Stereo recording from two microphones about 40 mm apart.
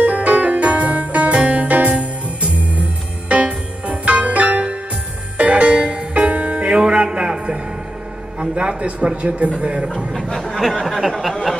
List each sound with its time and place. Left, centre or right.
0.0 s music: right
8.4 s a man's voice: right
10.6 s a sound: centre